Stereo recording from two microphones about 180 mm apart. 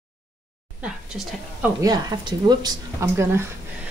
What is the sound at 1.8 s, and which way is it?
Speech, 20° right (ahead or behind).